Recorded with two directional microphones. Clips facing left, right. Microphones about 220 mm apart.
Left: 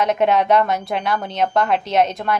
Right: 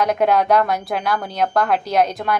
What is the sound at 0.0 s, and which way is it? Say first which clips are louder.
A woman's voice: even; centre (ahead or behind).